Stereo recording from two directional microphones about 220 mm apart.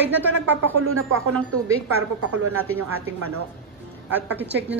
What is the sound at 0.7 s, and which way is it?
Speech, 70° right (ahead or behind).